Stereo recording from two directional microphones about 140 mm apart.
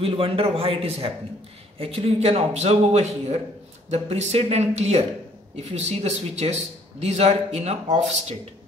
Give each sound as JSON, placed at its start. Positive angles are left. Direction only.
{"t": 0.0, "sound": "a man's voice", "side_deg": -40}